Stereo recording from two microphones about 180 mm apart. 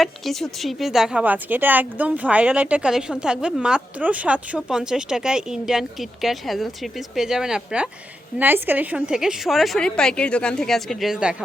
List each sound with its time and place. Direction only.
0.0 s a woman's voice: centre (ahead or behind)